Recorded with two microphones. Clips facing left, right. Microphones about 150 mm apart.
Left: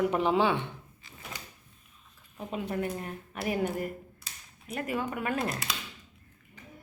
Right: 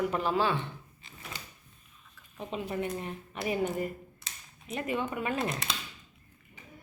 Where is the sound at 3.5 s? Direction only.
60° left (ahead or behind).